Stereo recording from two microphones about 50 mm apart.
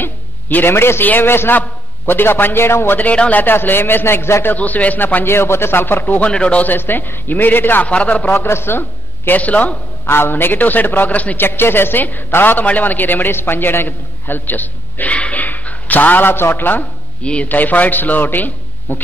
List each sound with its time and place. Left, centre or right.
0.0 s a man's voice: left
3.0 s a man's voice: left
3.4 s a man's voice: left
4.6 s a man's voice: left
6.3 s a man's voice: left
6.6 s a man's voice: left
7.8 s a man's voice: left
8.3 s a man's voice: left
9.4 s a man's voice: left
10.0 s a man's voice: left
11.3 s a man's voice: left
12.6 s a man's voice: left
17.2 s a man's voice: left
17.5 s a man's voice: left